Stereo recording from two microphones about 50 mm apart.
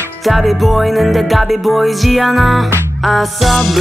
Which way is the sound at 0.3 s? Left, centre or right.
Centre.